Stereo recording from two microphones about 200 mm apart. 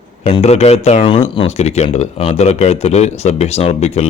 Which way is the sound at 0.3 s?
30° left (ahead or behind).